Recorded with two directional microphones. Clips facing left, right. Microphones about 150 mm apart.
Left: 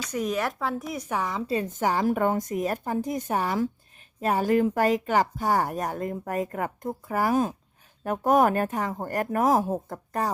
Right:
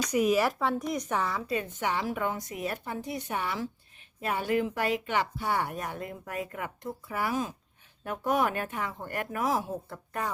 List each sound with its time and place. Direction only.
0.1 s speech: 5° right (ahead or behind); by 1.5 s 15° left (ahead or behind)
1.5 s speech: 35° left (ahead or behind)